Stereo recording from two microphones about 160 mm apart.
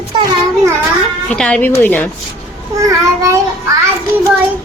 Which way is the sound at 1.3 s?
5° left (ahead or behind).